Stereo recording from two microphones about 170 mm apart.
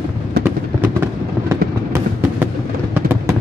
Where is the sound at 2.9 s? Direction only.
10° right (ahead or behind).